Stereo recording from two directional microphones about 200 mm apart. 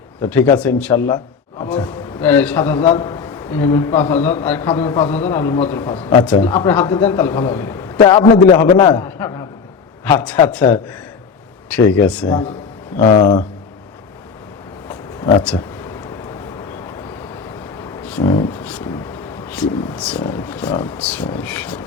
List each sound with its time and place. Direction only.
0.2 s a man's voice: 10° left (ahead or behind)
12.3 s speech: 25° left (ahead or behind)
14.8 s a sound: 20° left (ahead or behind)
20.0 s a man's voice: 5° left (ahead or behind)